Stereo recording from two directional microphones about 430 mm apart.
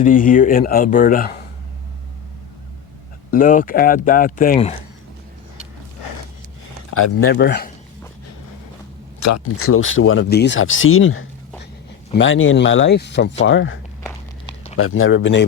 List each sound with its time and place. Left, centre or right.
0.0 s speech: centre
3.3 s speech: centre
7.2 s speech: left
9.2 s speech: left
14.8 s speech: left